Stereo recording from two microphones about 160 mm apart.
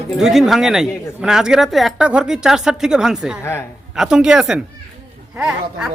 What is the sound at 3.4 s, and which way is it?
Speech, 15° left (ahead or behind).